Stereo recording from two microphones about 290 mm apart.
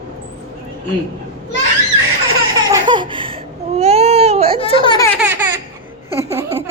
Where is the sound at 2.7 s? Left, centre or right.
Centre.